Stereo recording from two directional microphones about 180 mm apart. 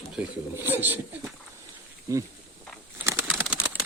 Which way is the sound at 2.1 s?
15° right (ahead or behind).